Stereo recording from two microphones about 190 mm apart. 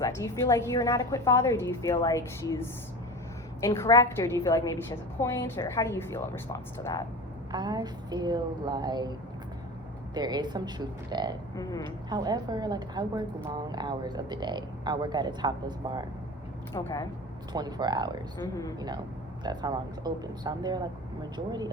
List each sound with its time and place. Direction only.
0.0 s a woman's voice: 15° left (ahead or behind)
3.8 s a woman's voice: 15° left (ahead or behind)
7.5 s a woman's voice: 20° right (ahead or behind)
10.2 s a woman's voice: 20° right (ahead or behind)
11.5 s a woman's voice: 20° left (ahead or behind)
11.8 s a woman's voice: 20° right (ahead or behind)
16.7 s a woman's voice: 15° left (ahead or behind)
17.5 s a woman's voice: 20° right (ahead or behind)
19.5 s a woman's voice: 20° right (ahead or behind)